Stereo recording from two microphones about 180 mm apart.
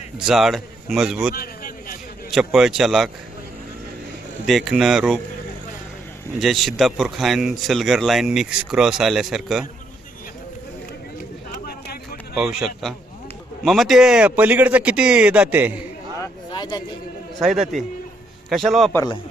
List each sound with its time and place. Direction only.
0.3 s a man's voice: centre (ahead or behind)
1.3 s a man's voice: 55° left (ahead or behind)
2.3 s a man's voice: centre (ahead or behind)
4.4 s a man's voice: centre (ahead or behind)
6.4 s a man's voice: centre (ahead or behind)
11.5 s a sound: 55° left (ahead or behind)
12.3 s a man's voice: 5° right (ahead or behind)
16.2 s a sound: 25° left (ahead or behind)
17.4 s a man's voice: centre (ahead or behind)
18.9 s speech: 25° left (ahead or behind)